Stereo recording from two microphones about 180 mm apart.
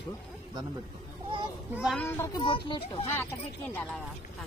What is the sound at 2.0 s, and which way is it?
Speech, 10° left (ahead or behind).